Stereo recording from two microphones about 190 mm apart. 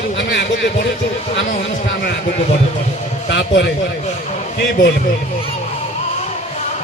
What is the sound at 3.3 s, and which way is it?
Speech, 65° left (ahead or behind).